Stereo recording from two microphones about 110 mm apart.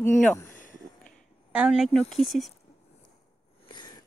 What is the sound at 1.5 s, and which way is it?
Speech, 5° right (ahead or behind).